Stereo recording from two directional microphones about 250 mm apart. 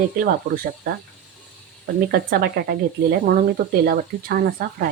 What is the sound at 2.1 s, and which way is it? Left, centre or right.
Speech, right.